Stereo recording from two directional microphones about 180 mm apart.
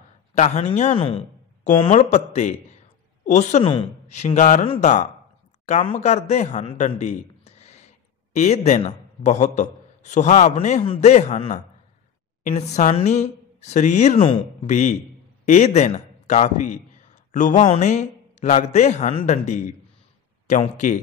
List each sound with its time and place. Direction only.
0.3 s a man's voice: 40° left (ahead or behind)